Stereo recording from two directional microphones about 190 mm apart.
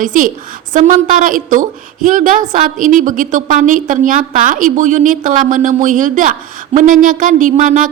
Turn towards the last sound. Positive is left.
turn(degrees=-45)  # may be behind; listen again after turning